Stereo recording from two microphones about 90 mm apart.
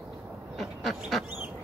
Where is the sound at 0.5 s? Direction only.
Centre (ahead or behind).